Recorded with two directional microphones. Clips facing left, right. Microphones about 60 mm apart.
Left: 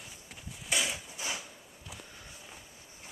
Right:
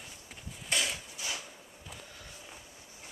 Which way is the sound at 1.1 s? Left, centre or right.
Left.